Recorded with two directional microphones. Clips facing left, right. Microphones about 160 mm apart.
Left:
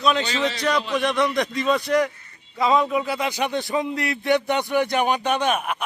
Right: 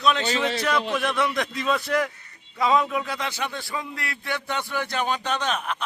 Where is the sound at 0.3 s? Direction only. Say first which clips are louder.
Even; 55° right (ahead or behind).